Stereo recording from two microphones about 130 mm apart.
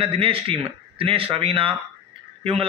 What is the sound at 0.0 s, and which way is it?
A man's voice, 45° right (ahead or behind).